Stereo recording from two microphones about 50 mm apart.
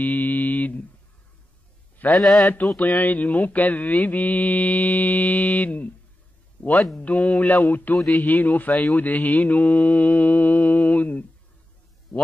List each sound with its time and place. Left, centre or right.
0.0 s a sound: left
2.1 s a man's voice: centre
2.6 s mantra: centre
3.0 s mantra: left